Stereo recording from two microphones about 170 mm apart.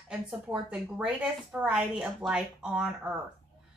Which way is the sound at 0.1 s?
5° right (ahead or behind).